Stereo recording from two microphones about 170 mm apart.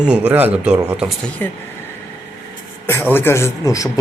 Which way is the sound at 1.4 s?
10° left (ahead or behind).